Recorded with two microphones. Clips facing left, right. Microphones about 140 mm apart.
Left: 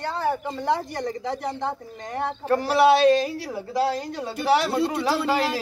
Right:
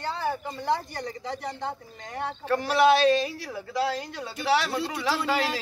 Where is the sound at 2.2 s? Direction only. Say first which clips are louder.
Left 4 dB; 40° left (ahead or behind).